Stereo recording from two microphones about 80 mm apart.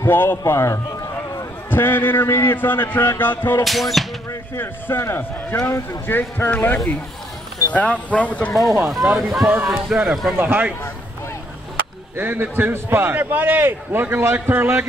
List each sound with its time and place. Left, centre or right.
0.0 s a man's voice: left
3.6 s speech: centre
4.6 s a man's voice: left
8.5 s speech: centre
10.3 s a man's voice: right
12.2 s a man's voice: right